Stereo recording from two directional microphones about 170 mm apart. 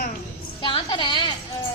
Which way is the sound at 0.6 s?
30° left (ahead or behind).